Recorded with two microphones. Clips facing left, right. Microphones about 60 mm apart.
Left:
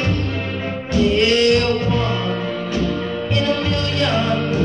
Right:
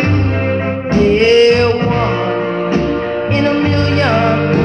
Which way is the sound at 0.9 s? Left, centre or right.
Right.